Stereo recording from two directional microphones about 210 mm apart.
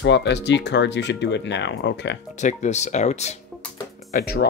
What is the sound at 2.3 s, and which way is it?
Speech, 35° left (ahead or behind).